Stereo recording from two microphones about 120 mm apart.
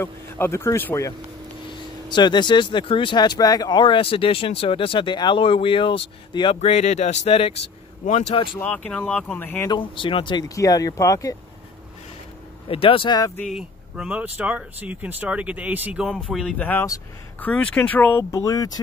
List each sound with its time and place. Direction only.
0.0 s speech: 20° left (ahead or behind)
2.0 s speech: 40° left (ahead or behind)
6.6 s speech: 65° left (ahead or behind)
8.5 s speech: 15° left (ahead or behind)
9.7 s speech: 45° left (ahead or behind)
10.5 s speech: 30° left (ahead or behind)
12.6 s speech: 50° left (ahead or behind)
13.5 s speech: 5° right (ahead or behind)
16.3 s speech: 5° left (ahead or behind)
18.3 s speech: 30° left (ahead or behind)